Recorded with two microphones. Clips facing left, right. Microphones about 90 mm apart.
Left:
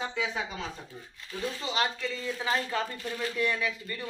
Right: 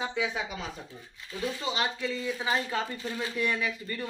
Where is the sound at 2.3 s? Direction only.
15° right (ahead or behind).